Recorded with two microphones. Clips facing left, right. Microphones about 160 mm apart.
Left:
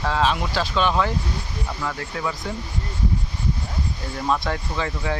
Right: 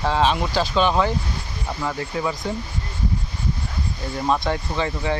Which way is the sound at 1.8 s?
15° right (ahead or behind).